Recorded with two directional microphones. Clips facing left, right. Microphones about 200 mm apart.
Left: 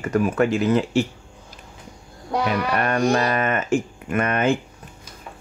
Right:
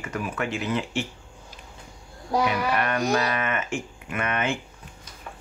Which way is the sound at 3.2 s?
45° left (ahead or behind).